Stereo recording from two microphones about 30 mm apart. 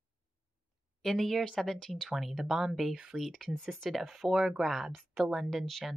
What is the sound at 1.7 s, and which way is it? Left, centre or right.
Speech, centre.